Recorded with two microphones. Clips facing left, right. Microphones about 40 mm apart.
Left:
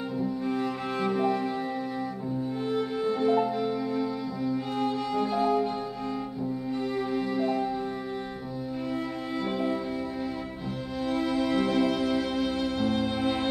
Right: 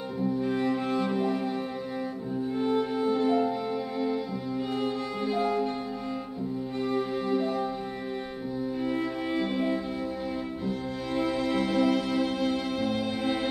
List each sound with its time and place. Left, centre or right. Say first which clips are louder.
1.0 s music: left 2 dB; centre
2.7 s music: right 1 dB; centre
7.2 s music: even; centre
11.1 s music: even; centre